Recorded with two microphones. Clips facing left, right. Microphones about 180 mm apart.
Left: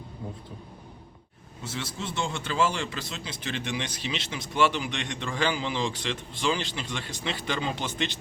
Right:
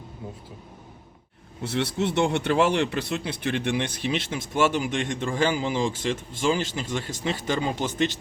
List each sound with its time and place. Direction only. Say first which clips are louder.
1.6 s speech: right 9 dB; 65° right (ahead or behind); by 8.2 s 45° right (ahead or behind)